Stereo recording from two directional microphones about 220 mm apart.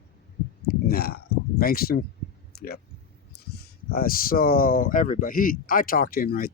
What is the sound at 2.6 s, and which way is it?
Speech, 45° left (ahead or behind).